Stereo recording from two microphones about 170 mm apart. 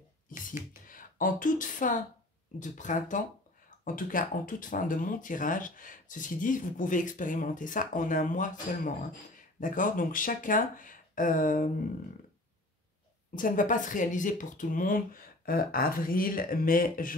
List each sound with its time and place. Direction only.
0.8 s speech: 55° left (ahead or behind)
13.3 s speech: 50° left (ahead or behind)